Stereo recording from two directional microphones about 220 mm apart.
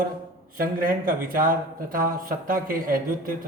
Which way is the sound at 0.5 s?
40° right (ahead or behind).